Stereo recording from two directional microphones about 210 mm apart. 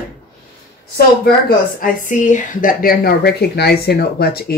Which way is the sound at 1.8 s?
40° left (ahead or behind).